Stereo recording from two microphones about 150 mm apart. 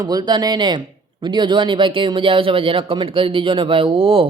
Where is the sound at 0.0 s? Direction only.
25° right (ahead or behind).